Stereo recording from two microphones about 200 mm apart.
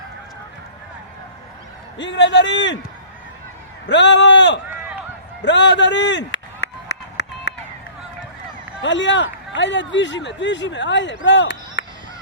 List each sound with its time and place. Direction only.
2.0 s speech: 65° left (ahead or behind)
3.8 s speech: 60° left (ahead or behind)
5.4 s a sound: 60° left (ahead or behind)
8.8 s speech: 65° left (ahead or behind)